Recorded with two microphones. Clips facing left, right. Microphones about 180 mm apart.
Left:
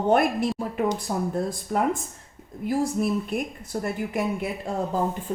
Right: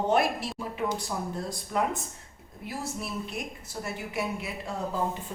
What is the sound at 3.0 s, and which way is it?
Speech, 45° left (ahead or behind).